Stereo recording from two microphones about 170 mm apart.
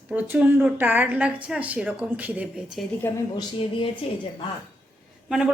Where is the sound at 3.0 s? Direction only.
15° left (ahead or behind).